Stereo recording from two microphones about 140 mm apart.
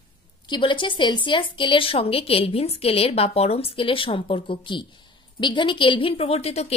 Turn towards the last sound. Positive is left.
turn(degrees=45)  # may be behind; listen again after turning